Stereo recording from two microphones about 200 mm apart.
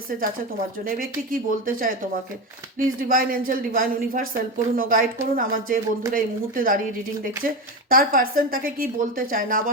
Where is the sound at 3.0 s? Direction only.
45° right (ahead or behind).